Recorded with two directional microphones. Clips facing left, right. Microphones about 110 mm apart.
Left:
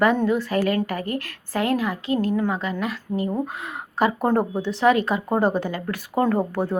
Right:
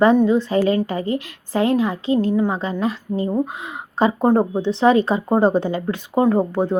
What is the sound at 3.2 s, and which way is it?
A woman's voice, 15° right (ahead or behind).